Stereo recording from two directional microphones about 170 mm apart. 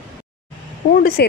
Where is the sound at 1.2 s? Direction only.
75° left (ahead or behind).